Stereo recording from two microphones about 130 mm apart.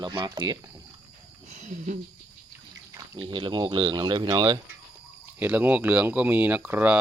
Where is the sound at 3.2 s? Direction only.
40° right (ahead or behind).